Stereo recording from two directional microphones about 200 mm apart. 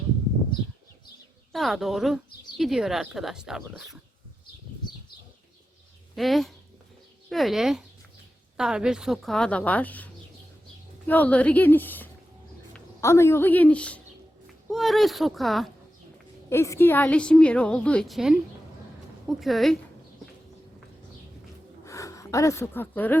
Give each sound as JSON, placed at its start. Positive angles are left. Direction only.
{"t": 1.5, "sound": "a woman's voice", "side_deg": 0}
{"t": 6.1, "sound": "a woman's voice", "side_deg": 0}
{"t": 16.5, "sound": "a woman's voice", "side_deg": 15}
{"t": 21.8, "sound": "speech", "side_deg": 15}